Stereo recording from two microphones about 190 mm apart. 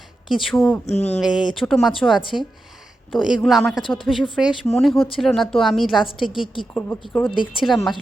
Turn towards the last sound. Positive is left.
turn(degrees=0)  # may be behind; listen again after turning